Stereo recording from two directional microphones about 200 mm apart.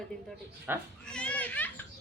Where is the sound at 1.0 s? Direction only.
5° left (ahead or behind).